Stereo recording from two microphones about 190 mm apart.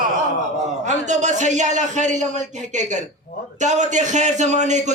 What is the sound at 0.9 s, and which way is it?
A man's voice, 40° right (ahead or behind).